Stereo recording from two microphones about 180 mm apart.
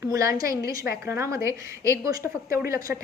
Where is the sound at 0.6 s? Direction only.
60° left (ahead or behind).